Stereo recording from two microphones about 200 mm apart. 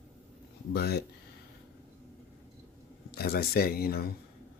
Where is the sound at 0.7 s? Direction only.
55° left (ahead or behind).